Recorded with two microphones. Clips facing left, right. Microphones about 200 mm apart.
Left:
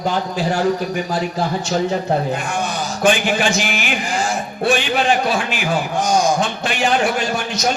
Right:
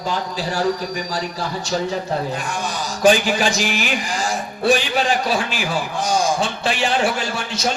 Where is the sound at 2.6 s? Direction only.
35° right (ahead or behind).